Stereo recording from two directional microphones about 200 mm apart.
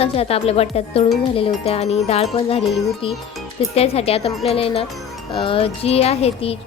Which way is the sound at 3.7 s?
30° left (ahead or behind).